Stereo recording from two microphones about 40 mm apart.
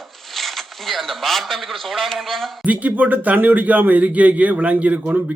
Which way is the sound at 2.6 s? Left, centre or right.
Right.